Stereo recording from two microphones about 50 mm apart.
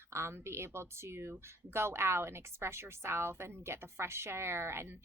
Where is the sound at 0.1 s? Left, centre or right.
Right.